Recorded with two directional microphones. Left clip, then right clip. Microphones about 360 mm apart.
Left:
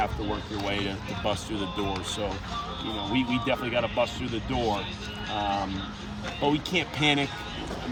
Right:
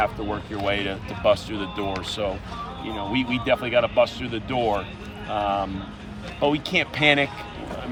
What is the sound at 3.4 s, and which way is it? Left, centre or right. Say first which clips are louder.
Speech: right 6 dB; centre.